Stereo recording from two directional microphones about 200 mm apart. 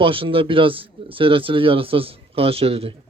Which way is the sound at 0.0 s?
25° right (ahead or behind).